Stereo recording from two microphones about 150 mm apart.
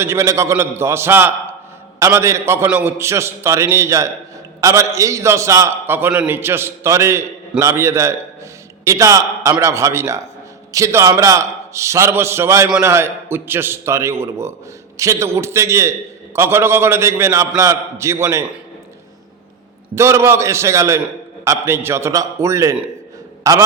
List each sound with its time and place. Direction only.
0.0 s a man's voice: 20° right (ahead or behind)
20.0 s a man's voice: 20° right (ahead or behind)